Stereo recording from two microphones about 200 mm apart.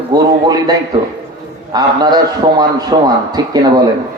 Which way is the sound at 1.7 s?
20° right (ahead or behind).